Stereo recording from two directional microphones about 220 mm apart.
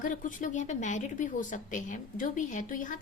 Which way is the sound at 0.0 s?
35° left (ahead or behind).